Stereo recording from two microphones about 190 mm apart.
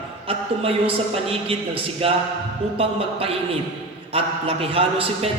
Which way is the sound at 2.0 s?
30° right (ahead or behind).